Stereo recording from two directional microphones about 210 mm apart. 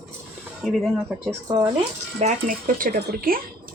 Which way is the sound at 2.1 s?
35° right (ahead or behind).